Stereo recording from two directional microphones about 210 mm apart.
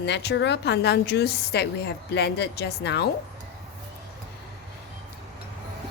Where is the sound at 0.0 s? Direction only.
55° left (ahead or behind).